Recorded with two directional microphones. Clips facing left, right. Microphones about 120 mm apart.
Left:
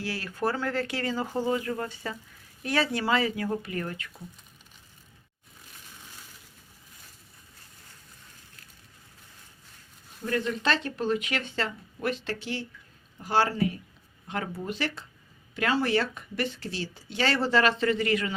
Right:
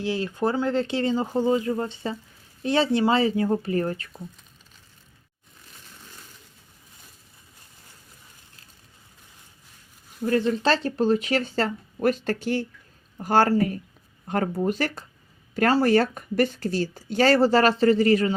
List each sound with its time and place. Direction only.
0.0 s speech: 20° right (ahead or behind)
10.2 s speech: 30° right (ahead or behind)